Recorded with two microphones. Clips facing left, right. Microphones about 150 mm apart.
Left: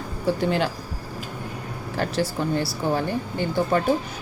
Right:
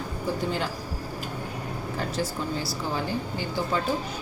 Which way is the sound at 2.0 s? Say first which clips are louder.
Left 6 dB; 75° left (ahead or behind).